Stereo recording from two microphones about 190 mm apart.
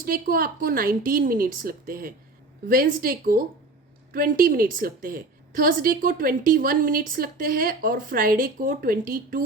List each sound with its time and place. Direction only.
0.0 s a woman's voice: 50° right (ahead or behind)